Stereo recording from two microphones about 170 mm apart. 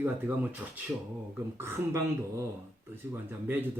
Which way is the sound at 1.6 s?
15° right (ahead or behind).